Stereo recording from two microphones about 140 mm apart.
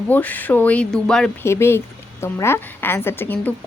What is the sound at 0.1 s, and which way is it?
Speech, 10° left (ahead or behind).